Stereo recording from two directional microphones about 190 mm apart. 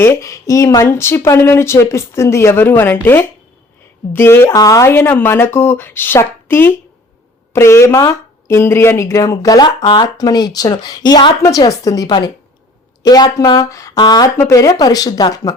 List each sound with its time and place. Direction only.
0.0 s speech: 15° left (ahead or behind)